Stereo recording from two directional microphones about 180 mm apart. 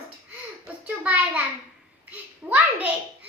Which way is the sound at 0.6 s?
5° right (ahead or behind).